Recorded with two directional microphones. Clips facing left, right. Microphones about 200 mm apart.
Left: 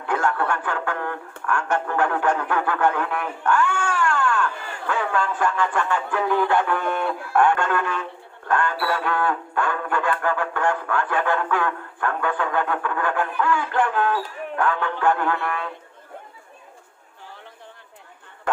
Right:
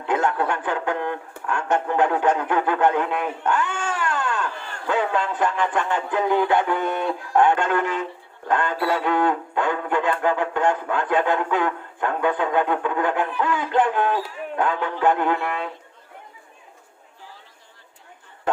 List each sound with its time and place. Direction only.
0.0 s a sound: 20° right (ahead or behind)
1.5 s speech: 20° right (ahead or behind)
8.4 s music: 20° right (ahead or behind)
14.5 s speech: 20° right (ahead or behind)